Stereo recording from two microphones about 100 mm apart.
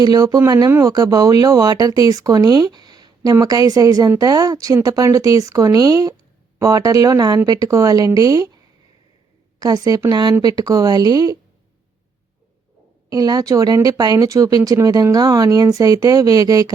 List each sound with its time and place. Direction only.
0.0 s speech: 40° right (ahead or behind)
9.6 s a woman's voice: 40° right (ahead or behind)
13.1 s speech: 40° right (ahead or behind)